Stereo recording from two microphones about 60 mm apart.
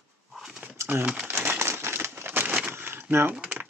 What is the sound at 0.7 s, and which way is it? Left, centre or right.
Crumpling, right.